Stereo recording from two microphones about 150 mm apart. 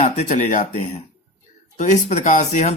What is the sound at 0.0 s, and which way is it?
Speech, 50° left (ahead or behind).